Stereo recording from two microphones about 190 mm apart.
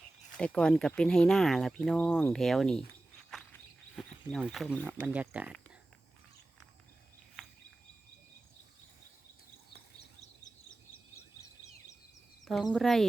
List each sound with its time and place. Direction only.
0.3 s speech: 5° left (ahead or behind)
3.2 s a sound: centre (ahead or behind)
5.0 s speech: 5° right (ahead or behind)
12.7 s speech: centre (ahead or behind)